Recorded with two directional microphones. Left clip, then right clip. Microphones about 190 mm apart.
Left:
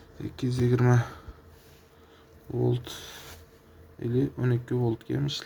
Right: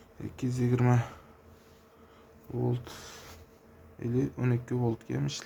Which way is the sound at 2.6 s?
10° left (ahead or behind).